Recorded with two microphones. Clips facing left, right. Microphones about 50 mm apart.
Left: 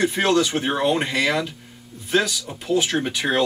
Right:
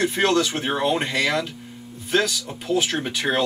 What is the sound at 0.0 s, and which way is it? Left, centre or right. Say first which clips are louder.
Speech: left 1 dB; centre.